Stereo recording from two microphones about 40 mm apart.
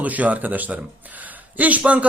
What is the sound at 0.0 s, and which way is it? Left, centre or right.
A man's voice, right.